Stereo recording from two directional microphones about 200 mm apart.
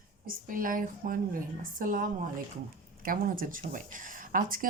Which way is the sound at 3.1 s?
45° right (ahead or behind).